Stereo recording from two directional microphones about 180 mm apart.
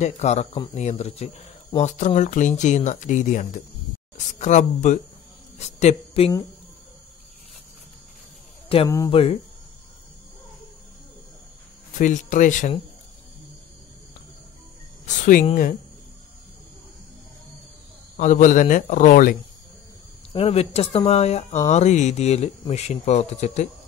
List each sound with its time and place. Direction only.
0.0 s speech: 40° left (ahead or behind)
8.8 s speech: 15° left (ahead or behind)
9.1 s speech: 35° left (ahead or behind)
12.0 s speech: 45° left (ahead or behind)
18.1 s speech: 45° left (ahead or behind)
20.3 s speech: 35° left (ahead or behind)